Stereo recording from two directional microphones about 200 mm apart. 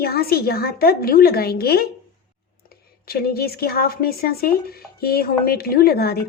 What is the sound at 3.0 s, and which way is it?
Speech, 50° left (ahead or behind).